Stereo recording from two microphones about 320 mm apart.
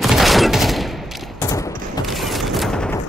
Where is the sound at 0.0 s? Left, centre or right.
Centre.